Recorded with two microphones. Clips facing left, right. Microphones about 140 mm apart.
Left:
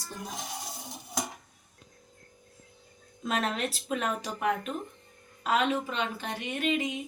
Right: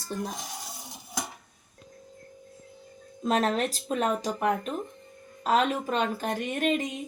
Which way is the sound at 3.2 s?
35° right (ahead or behind).